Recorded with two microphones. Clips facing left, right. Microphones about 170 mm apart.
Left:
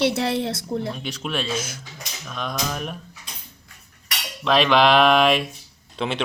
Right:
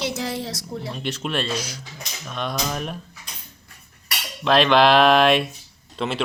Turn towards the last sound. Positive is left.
turn(degrees=0)  # may be behind; listen again after turning